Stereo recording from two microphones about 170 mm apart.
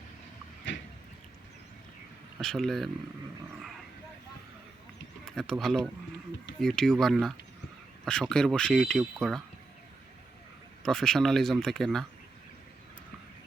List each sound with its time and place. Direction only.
0.7 s vehicle: 90° left
2.4 s speech: centre (ahead or behind)
5.2 s speech: centre (ahead or behind)
10.8 s speech: 5° left (ahead or behind)